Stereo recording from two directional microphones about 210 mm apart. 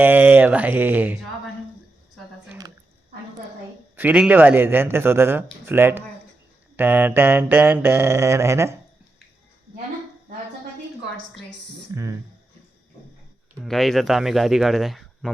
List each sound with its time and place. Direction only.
0.0 s mantra: 10° right (ahead or behind)
2.5 s a sound: 20° right (ahead or behind)
3.9 s mantra: 10° right (ahead or behind)
13.7 s speech: centre (ahead or behind)